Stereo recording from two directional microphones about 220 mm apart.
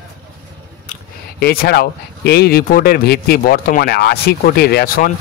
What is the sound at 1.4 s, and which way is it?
Speech, 45° left (ahead or behind).